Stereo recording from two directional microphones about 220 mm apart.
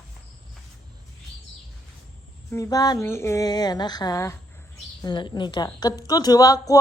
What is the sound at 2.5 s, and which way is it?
A woman's voice, 15° left (ahead or behind).